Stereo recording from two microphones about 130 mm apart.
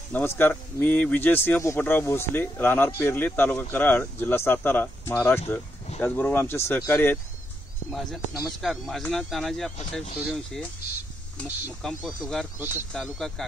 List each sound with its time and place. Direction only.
0.1 s speech: 15° left (ahead or behind)
7.9 s speech: 5° left (ahead or behind)
11.8 s speech: centre (ahead or behind)
12.5 s speech: 15° right (ahead or behind)
12.9 s speech: centre (ahead or behind)